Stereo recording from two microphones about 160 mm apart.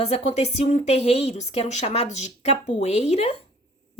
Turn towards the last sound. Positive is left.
turn(degrees=40)  # may be behind; listen again after turning